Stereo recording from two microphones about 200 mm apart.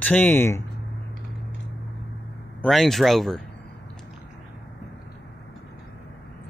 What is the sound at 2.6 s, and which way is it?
Speech, centre (ahead or behind).